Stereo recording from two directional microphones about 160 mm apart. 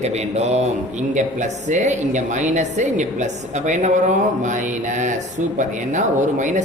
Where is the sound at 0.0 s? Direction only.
40° right (ahead or behind).